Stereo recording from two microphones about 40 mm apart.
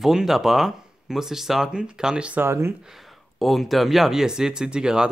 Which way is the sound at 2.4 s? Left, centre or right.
Right.